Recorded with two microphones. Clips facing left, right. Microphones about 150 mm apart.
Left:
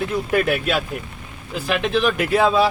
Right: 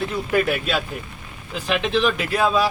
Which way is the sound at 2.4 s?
25° left (ahead or behind).